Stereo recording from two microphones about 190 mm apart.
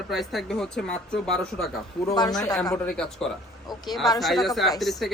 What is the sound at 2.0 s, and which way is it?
Speech, 20° left (ahead or behind).